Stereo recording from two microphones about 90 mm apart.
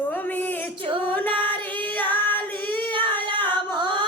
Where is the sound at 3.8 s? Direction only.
55° right (ahead or behind).